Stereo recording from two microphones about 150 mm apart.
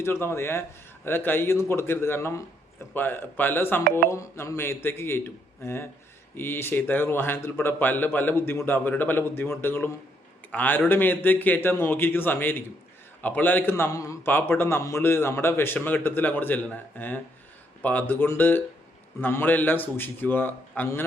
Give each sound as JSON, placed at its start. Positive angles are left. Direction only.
{"t": 0.0, "sound": "a man's voice", "side_deg": 15}